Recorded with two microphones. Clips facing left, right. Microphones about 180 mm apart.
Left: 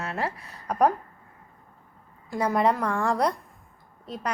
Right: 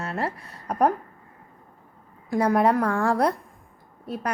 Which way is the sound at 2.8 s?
Centre (ahead or behind).